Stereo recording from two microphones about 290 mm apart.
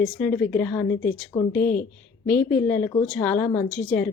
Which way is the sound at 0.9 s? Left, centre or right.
Left.